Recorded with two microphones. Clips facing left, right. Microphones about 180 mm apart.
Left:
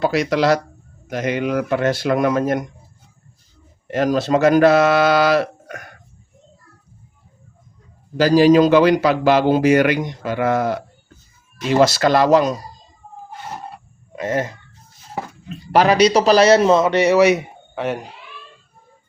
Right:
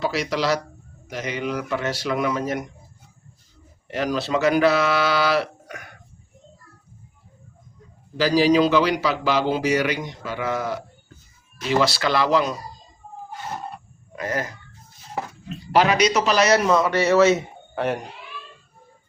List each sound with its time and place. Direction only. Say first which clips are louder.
0.0 s a man's voice: left 6 dB; 55° left (ahead or behind)
3.9 s a man's voice: left 6 dB; 50° left (ahead or behind)
8.1 s a man's voice: left 6 dB; 45° left (ahead or behind)
14.2 s a man's voice: left 5 dB; 25° left (ahead or behind)
15.7 s a man's voice: left 5 dB; 40° left (ahead or behind); by 17.4 s 15° left (ahead or behind)
17.7 s speech: left 1 dB; centre (ahead or behind)